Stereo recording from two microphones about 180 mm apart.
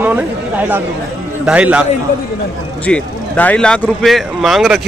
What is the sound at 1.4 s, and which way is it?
Speech, 5° right (ahead or behind).